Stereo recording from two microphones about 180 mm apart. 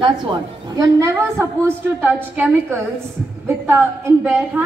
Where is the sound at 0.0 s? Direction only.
25° right (ahead or behind).